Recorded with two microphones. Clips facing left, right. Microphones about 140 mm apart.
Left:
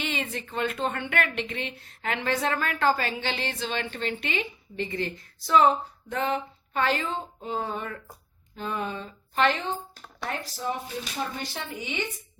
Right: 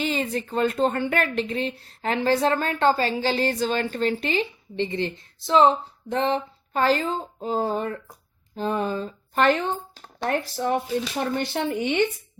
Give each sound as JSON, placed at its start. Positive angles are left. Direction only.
{"t": 0.0, "sound": "speech", "side_deg": -35}
{"t": 10.2, "sound": "speech", "side_deg": -60}